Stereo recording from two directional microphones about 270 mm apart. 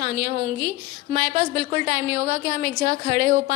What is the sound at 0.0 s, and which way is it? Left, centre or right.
A woman's voice, right.